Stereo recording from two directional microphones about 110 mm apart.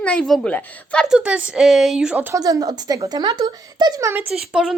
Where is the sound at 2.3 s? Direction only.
30° right (ahead or behind).